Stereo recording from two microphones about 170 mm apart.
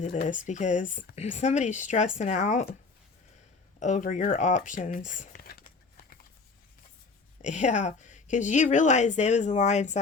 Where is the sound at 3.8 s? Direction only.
45° left (ahead or behind).